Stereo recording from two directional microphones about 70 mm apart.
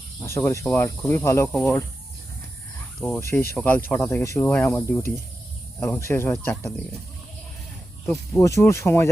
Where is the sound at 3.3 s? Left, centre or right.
Left.